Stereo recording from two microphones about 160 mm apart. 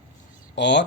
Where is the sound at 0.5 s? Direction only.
90° left.